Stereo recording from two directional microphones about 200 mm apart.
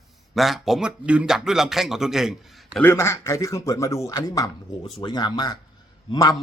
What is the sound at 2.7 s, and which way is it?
Speech, 10° left (ahead or behind).